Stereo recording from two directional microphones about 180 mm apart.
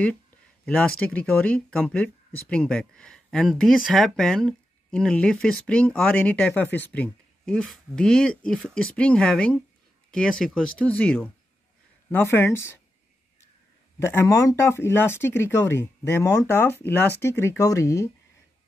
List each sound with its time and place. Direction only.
0.7 s speech: 5° left (ahead or behind)
13.9 s speech: 15° left (ahead or behind)